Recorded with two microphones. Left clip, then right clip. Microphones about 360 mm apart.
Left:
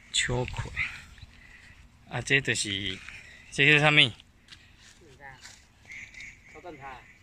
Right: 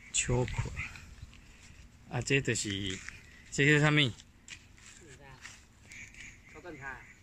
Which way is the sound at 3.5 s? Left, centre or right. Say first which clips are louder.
Left 6 dB; centre.